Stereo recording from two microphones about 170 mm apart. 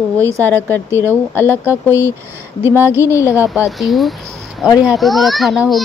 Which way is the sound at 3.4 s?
Centre (ahead or behind).